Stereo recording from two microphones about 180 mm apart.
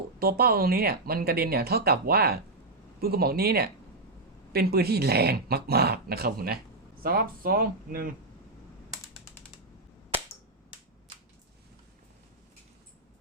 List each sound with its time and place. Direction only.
0.2 s speech: 60° right (ahead or behind)